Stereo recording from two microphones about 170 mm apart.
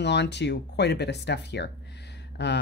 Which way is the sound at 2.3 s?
90° left.